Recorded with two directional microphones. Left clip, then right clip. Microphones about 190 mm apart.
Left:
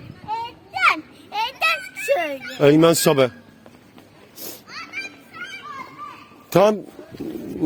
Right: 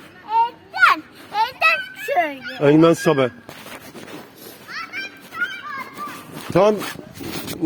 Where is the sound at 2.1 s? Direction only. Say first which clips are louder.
Right 5 dB; 20° left (ahead or behind).